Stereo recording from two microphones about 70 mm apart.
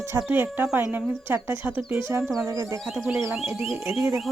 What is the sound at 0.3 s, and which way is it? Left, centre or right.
Speech, right.